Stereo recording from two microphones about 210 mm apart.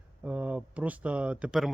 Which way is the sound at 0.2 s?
5° right (ahead or behind).